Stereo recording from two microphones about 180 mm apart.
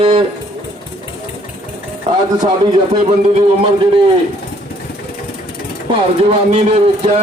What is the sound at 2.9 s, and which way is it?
Speech, 30° right (ahead or behind).